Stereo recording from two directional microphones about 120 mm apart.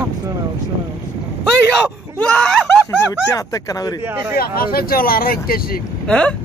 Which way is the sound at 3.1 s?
30° left (ahead or behind).